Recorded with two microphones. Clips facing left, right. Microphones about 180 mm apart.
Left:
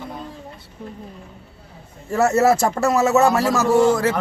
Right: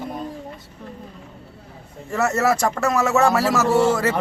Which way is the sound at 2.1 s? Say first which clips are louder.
Left 4 dB; 30° left (ahead or behind).